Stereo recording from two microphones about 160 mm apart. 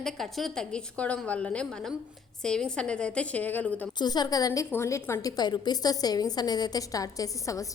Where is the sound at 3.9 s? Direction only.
25° left (ahead or behind).